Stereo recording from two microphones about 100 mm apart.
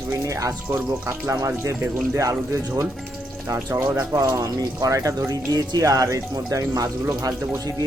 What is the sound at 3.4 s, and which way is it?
Speech, 25° right (ahead or behind).